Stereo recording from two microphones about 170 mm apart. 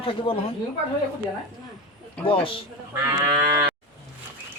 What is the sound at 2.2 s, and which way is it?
Speech, 30° left (ahead or behind).